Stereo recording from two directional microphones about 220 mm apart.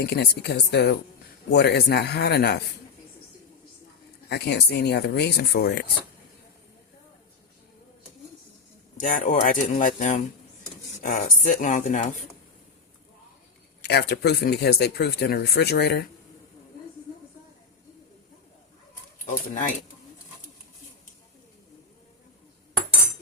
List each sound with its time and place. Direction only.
0.0 s speech: 45° left (ahead or behind)
4.3 s speech: 50° left (ahead or behind)
9.0 s speech: 35° left (ahead or behind)
13.8 s speech: 50° left (ahead or behind)
19.2 s speech: 35° left (ahead or behind)